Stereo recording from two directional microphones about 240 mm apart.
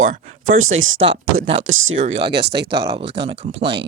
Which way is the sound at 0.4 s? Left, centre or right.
Right.